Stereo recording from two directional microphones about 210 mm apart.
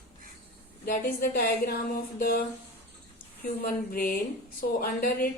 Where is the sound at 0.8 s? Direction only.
45° left (ahead or behind).